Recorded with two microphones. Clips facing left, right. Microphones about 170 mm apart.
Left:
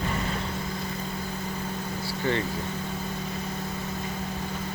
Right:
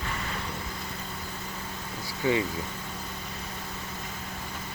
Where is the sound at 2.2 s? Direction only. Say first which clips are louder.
Right 2 dB; 5° right (ahead or behind).